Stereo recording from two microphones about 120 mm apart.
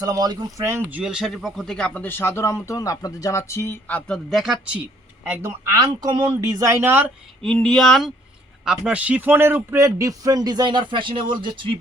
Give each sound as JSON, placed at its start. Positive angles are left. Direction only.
{"t": 0.0, "sound": "speech", "side_deg": -30}
{"t": 0.9, "sound": "speech", "side_deg": -10}
{"t": 5.3, "sound": "speech", "side_deg": -25}
{"t": 7.4, "sound": "speech", "side_deg": 5}